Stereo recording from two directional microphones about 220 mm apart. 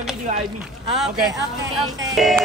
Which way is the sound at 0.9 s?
Centre (ahead or behind).